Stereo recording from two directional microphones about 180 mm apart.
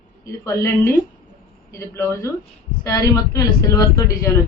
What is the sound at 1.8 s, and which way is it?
Speech, 15° left (ahead or behind).